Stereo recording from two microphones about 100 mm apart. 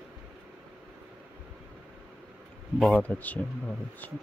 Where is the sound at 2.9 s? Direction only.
15° left (ahead or behind).